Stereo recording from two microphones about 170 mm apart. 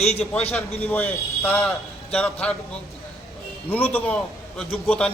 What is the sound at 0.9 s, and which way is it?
A man's voice, 10° left (ahead or behind).